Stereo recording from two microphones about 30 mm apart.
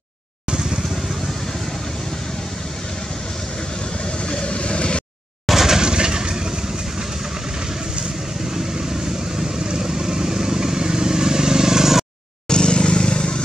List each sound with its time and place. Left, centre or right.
0.5 s vehicle: right
4.3 s vehicle: left
5.5 s vehicle: centre
5.8 s vehicle: right
9.4 s vehicle: right
12.4 s vehicle: left